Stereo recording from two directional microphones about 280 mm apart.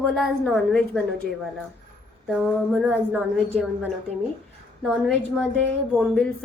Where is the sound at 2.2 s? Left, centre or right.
Centre.